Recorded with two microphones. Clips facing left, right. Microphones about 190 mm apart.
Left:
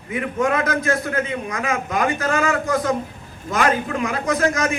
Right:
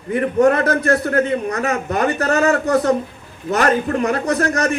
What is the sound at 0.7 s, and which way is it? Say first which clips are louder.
Speech: right 4 dB; 65° right (ahead or behind).